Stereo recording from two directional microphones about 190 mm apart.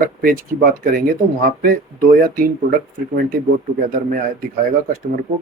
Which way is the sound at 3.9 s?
45° right (ahead or behind).